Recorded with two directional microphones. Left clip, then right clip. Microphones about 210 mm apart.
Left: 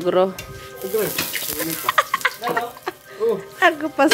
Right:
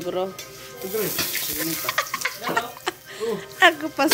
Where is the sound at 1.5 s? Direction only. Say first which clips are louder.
Left 7 dB; 15° left (ahead or behind).